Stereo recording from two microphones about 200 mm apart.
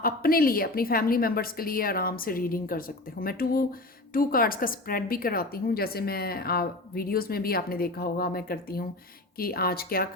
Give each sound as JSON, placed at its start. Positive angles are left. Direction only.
{"t": 0.0, "sound": "a woman's voice", "side_deg": 45}